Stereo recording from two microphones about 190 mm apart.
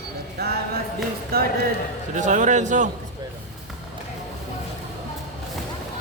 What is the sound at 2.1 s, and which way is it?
Speech, 40° right (ahead or behind).